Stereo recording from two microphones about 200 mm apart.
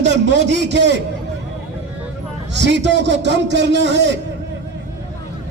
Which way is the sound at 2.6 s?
60° right (ahead or behind).